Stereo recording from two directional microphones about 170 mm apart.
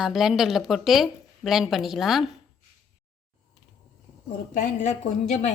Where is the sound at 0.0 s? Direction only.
Centre (ahead or behind).